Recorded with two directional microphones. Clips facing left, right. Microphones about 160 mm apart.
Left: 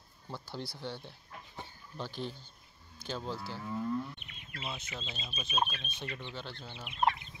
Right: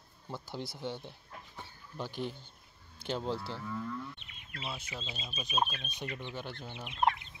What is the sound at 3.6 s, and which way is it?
Livestock, 25° left (ahead or behind).